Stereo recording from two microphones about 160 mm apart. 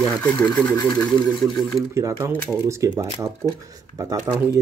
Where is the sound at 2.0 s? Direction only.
15° right (ahead or behind).